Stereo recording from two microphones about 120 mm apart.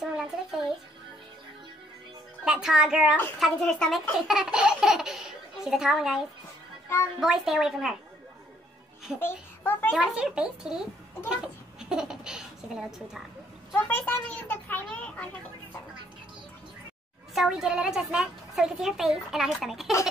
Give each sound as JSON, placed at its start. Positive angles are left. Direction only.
{"t": 0.0, "sound": "a child's voice", "side_deg": -5}
{"t": 2.4, "sound": "a woman's voice", "side_deg": -5}
{"t": 9.2, "sound": "a child's voice", "side_deg": 15}
{"t": 9.9, "sound": "a woman's voice", "side_deg": -5}
{"t": 13.7, "sound": "a child's voice", "side_deg": 15}
{"t": 17.3, "sound": "a woman's voice", "side_deg": -5}